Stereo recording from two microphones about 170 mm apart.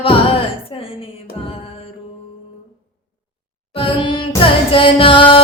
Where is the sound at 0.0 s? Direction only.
30° left (ahead or behind).